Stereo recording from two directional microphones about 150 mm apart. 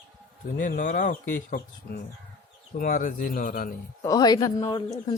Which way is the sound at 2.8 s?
60° left (ahead or behind).